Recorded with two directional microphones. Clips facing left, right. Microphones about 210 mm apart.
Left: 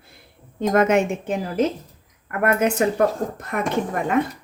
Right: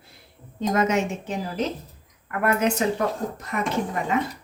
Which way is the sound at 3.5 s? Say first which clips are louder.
Left 3 dB; 55° left (ahead or behind).